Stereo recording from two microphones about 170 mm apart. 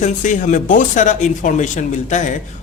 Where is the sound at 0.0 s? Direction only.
45° left (ahead or behind).